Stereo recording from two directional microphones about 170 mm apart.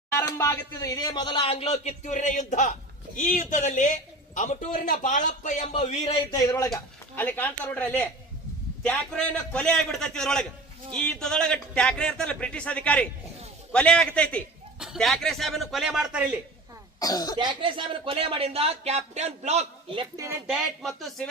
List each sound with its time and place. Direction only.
0.1 s a man's voice: 15° left (ahead or behind); by 6.1 s 40° left (ahead or behind)
6.3 s a man's voice: 15° left (ahead or behind); by 16.2 s 5° right (ahead or behind)
17.0 s speech: 20° left (ahead or behind)
17.3 s speech: 30° right (ahead or behind)
20.1 s speech: 15° right (ahead or behind)
20.5 s speech: centre (ahead or behind)